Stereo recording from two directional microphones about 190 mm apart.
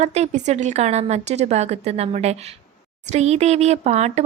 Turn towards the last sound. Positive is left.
turn(degrees=-35)  # may be behind; listen again after turning